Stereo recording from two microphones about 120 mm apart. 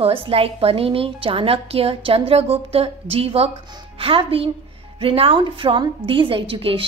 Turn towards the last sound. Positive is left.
turn(degrees=-50)  # may be behind; listen again after turning